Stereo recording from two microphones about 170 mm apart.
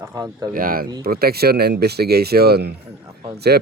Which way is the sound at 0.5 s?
55° right (ahead or behind).